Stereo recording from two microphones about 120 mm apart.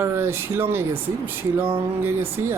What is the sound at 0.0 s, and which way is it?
Speech, 20° right (ahead or behind).